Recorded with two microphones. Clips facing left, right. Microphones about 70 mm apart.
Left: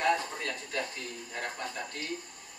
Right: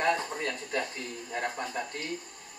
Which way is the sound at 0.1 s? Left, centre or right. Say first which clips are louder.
Even; right.